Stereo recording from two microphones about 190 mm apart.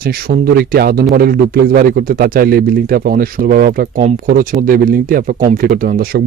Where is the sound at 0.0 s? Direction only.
55° right (ahead or behind).